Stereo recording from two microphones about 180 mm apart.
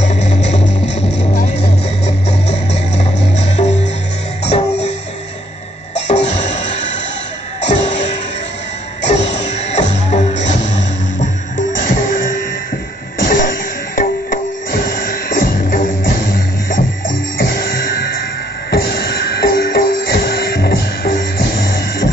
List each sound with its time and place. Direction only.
0.0 s music: 40° left (ahead or behind)
2.0 s music: 35° left (ahead or behind)
5.9 s music: 40° left (ahead or behind)